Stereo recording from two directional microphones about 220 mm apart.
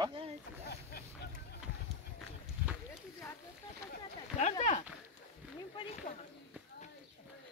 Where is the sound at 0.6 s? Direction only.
45° left (ahead or behind).